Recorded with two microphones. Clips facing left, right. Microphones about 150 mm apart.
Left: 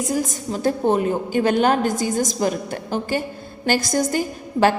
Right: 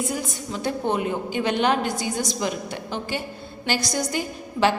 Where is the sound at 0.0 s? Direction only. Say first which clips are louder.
Left 5 dB; 40° left (ahead or behind).